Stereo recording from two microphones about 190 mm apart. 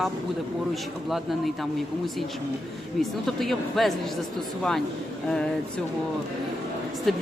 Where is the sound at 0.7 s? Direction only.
Centre (ahead or behind).